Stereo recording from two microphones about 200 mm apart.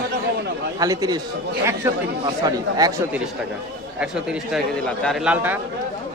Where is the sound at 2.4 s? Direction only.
20° right (ahead or behind).